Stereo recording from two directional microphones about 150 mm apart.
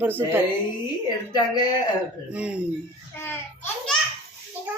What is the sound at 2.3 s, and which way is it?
Speech, 10° right (ahead or behind).